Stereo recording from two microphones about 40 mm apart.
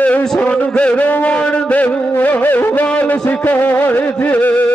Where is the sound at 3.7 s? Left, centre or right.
Left.